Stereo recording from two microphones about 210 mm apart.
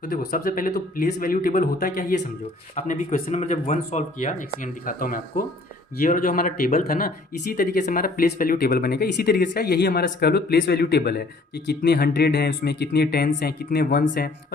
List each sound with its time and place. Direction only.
0.0 s speech: 40° left (ahead or behind)